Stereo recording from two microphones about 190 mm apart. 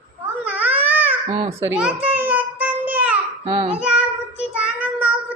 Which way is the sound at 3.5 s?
30° right (ahead or behind).